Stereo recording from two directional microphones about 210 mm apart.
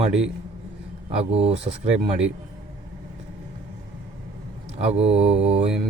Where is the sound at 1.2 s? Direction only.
30° right (ahead or behind).